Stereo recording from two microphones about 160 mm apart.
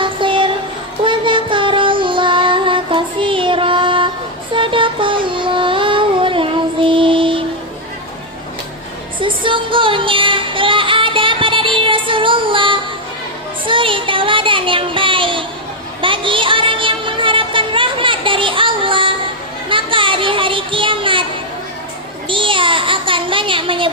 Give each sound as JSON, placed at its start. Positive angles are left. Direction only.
{"t": 0.0, "sound": "music", "side_deg": -30}
{"t": 1.0, "sound": "child singing", "side_deg": -30}
{"t": 4.5, "sound": "music", "side_deg": -30}
{"t": 9.2, "sound": "music", "side_deg": -30}
{"t": 13.7, "sound": "child singing", "side_deg": -30}
{"t": 16.0, "sound": "music", "side_deg": -30}
{"t": 19.7, "sound": "child singing", "side_deg": -30}
{"t": 22.3, "sound": "a sound", "side_deg": -30}